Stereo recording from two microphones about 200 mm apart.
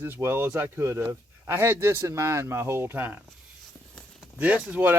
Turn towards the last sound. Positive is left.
turn(degrees=-10)  # may be behind; listen again after turning